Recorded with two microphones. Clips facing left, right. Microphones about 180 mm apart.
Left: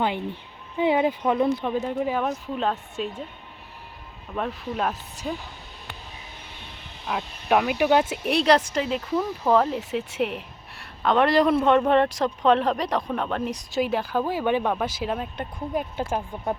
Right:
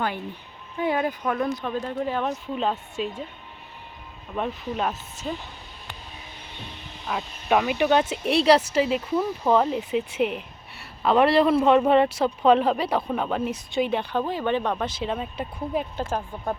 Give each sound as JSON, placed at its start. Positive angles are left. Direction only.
{"t": 0.8, "sound": "speech", "side_deg": 20}
{"t": 4.4, "sound": "speech", "side_deg": 0}
{"t": 7.1, "sound": "speech", "side_deg": 5}